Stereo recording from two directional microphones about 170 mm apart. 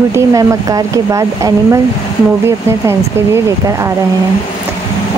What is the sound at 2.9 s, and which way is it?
Speech, 15° right (ahead or behind).